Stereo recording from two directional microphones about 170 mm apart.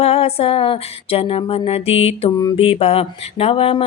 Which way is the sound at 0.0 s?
35° left (ahead or behind).